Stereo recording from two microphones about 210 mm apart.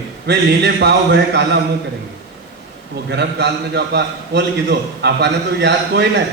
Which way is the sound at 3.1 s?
55° right (ahead or behind).